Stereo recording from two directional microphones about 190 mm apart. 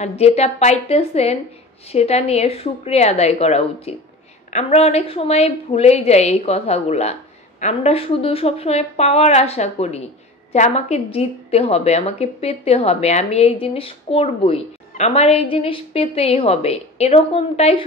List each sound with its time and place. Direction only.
0.0 s a woman's voice: 35° left (ahead or behind)